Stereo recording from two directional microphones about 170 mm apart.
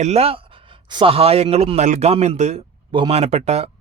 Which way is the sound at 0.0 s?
35° right (ahead or behind).